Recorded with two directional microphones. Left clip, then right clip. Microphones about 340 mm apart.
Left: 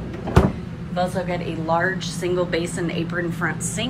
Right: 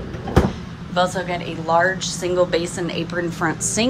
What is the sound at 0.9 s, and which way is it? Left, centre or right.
A woman's voice, centre.